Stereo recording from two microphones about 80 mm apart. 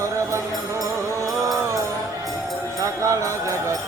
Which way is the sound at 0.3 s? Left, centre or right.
Right.